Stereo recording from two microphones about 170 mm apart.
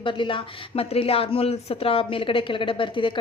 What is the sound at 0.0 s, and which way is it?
A woman's voice, 30° left (ahead or behind).